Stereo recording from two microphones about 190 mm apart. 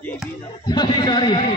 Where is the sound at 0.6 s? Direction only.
25° left (ahead or behind).